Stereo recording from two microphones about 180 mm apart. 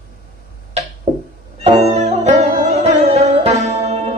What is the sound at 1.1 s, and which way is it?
Music, 40° right (ahead or behind).